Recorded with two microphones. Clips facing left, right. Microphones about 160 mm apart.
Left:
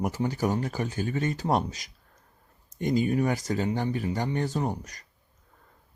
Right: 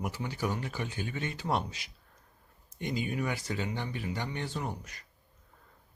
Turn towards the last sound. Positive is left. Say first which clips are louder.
# left 7 dB
turn(degrees=40)  # may be behind; listen again after turning